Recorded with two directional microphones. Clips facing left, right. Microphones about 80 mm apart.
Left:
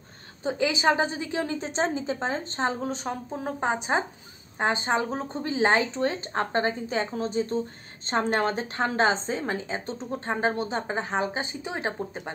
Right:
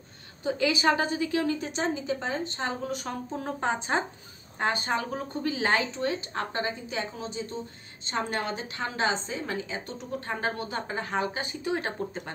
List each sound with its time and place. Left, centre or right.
0.4 s a woman's voice: left